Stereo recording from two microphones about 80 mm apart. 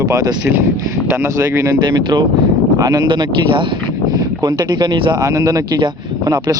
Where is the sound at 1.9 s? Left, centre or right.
Right.